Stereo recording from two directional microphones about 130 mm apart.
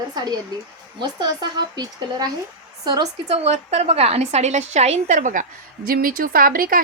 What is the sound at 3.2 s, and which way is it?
A woman's voice, 50° right (ahead or behind).